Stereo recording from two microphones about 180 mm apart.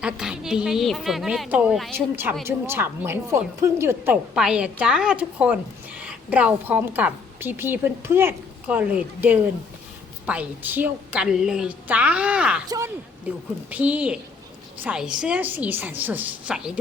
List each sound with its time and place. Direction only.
0.0 s a woman's voice: 5° right (ahead or behind)
12.6 s speech: 20° right (ahead or behind)
13.7 s a woman's voice: 10° right (ahead or behind)